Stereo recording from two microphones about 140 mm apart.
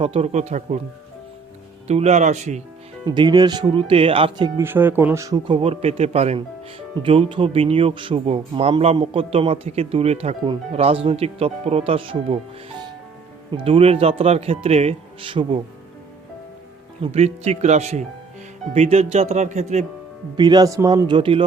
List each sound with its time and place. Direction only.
0.0 s speech: 45° right (ahead or behind)
1.9 s speech: 50° right (ahead or behind)
3.1 s speech: 30° right (ahead or behind)
4.6 s speech: 15° right (ahead or behind)
5.5 s speech: 45° right (ahead or behind)
17.0 s speech: 50° right (ahead or behind)
20.3 s speech: 30° right (ahead or behind)